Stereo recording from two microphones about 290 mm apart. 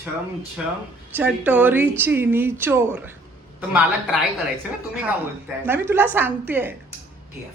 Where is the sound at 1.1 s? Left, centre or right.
Centre.